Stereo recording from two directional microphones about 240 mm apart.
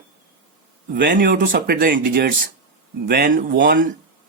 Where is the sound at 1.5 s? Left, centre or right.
Right.